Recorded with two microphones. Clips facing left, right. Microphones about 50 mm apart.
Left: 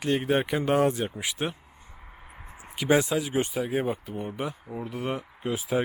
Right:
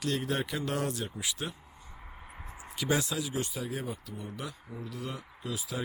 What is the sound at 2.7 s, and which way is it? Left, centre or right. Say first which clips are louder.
Speech: left 7 dB; left.